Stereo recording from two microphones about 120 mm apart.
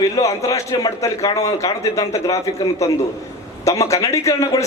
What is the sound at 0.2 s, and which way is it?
A man's voice, 25° left (ahead or behind).